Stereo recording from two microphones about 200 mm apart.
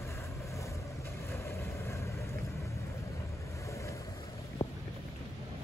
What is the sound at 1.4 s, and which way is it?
Vehicle, 15° left (ahead or behind).